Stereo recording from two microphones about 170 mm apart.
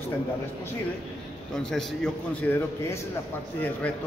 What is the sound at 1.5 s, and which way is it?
A man's voice, 5° left (ahead or behind).